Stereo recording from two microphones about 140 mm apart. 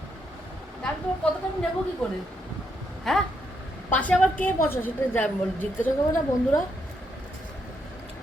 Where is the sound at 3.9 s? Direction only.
10° left (ahead or behind).